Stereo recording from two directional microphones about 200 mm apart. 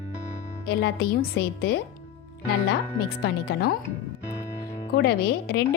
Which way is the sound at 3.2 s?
55° left (ahead or behind).